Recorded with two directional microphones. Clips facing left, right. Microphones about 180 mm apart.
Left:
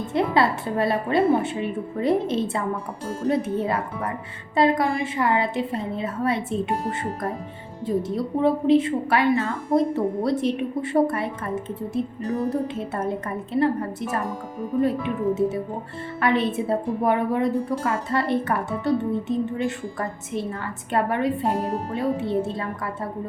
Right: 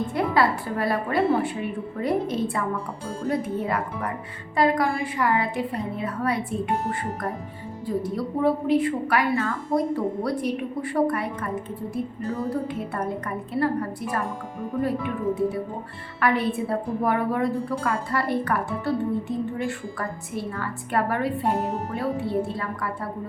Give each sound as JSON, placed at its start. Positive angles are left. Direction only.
{"t": 0.1, "sound": "a woman's voice", "side_deg": 25}
{"t": 7.9, "sound": "a woman's voice", "side_deg": 25}
{"t": 14.8, "sound": "a woman's voice", "side_deg": 20}